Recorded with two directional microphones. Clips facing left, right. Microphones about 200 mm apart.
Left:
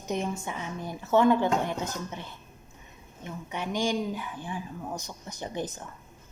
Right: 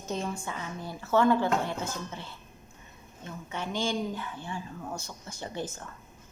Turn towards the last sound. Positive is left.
turn(degrees=15)  # may be behind; listen again after turning